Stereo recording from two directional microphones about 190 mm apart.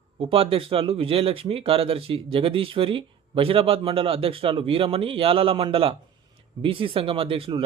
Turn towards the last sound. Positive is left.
turn(degrees=-30)  # may be behind; listen again after turning